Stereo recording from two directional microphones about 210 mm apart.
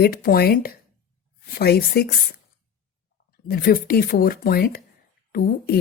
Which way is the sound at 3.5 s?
45° left (ahead or behind).